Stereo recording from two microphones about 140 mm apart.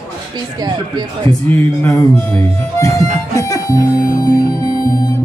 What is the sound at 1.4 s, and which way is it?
Music, 15° left (ahead or behind).